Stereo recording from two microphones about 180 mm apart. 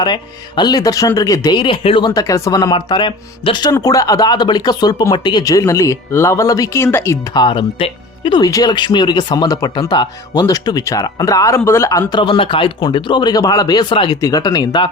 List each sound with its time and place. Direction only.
0.0 s speech: 25° left (ahead or behind)
7.4 s speech: 30° left (ahead or behind)